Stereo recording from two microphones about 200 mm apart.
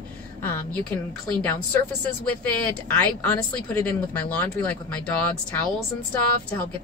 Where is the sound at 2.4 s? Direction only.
5° left (ahead or behind).